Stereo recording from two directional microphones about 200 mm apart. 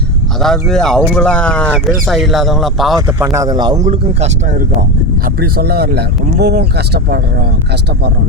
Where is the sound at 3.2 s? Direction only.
15° right (ahead or behind).